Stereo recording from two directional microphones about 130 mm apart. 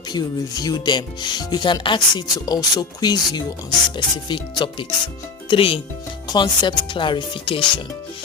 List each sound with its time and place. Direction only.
0.1 s speech: 30° left (ahead or behind)